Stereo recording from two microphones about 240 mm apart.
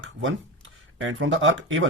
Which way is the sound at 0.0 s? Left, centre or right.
Right.